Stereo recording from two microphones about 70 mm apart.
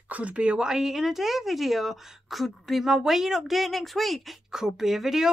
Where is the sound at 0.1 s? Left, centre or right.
Centre.